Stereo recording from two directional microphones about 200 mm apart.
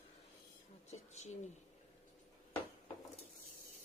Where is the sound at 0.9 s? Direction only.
35° left (ahead or behind).